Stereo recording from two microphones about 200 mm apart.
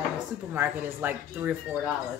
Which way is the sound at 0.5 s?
10° right (ahead or behind).